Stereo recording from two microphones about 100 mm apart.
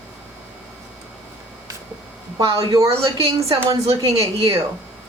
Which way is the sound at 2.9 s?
80° right.